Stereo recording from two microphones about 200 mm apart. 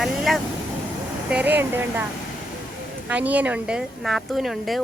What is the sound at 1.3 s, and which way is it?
Speech, 10° right (ahead or behind).